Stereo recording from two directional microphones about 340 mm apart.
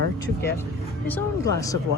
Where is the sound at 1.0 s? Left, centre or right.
Centre.